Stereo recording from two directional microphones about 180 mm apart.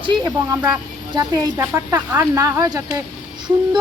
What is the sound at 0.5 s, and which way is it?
Speech, 10° right (ahead or behind).